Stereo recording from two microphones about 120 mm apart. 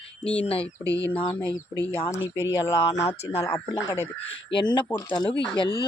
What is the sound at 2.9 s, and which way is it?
Speech, 25° left (ahead or behind).